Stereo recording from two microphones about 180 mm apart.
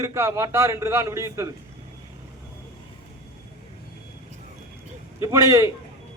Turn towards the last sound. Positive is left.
turn(degrees=-20)  # may be behind; listen again after turning